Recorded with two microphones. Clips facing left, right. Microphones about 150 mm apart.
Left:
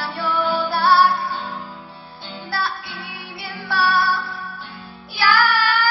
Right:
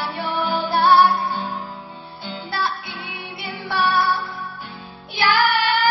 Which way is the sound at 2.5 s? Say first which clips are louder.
Even; 20° right (ahead or behind).